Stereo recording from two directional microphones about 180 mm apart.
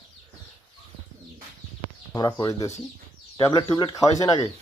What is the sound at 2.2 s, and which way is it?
Speech, 20° left (ahead or behind).